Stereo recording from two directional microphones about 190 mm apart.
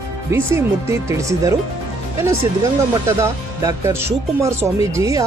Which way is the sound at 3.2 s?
15° right (ahead or behind).